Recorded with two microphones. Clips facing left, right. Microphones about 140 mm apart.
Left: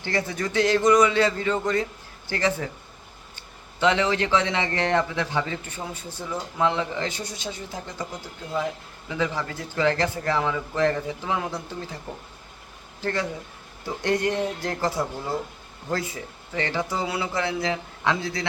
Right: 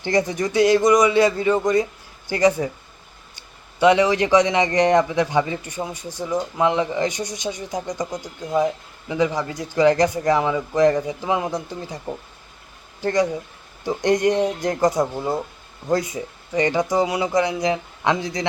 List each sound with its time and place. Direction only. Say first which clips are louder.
0.0 s speech: right 6 dB; 15° right (ahead or behind)
13.0 s speech: right 7 dB; 15° right (ahead or behind)